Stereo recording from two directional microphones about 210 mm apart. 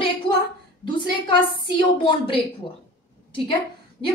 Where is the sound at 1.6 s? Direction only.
25° left (ahead or behind).